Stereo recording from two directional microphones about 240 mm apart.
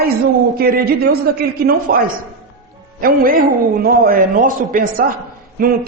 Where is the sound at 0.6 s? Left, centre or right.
Right.